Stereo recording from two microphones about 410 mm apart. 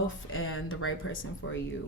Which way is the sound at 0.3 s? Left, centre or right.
Left.